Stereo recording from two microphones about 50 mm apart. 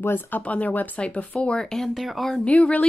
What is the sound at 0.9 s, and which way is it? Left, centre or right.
Speech, left.